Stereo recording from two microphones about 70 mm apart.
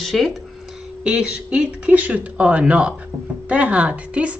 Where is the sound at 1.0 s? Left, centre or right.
Centre.